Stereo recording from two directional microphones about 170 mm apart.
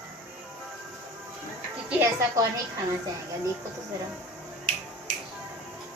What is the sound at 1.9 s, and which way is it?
Speech, 15° right (ahead or behind).